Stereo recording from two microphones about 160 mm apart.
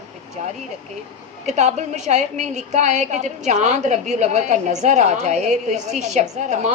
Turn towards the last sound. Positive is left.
turn(degrees=-45)  # may be behind; listen again after turning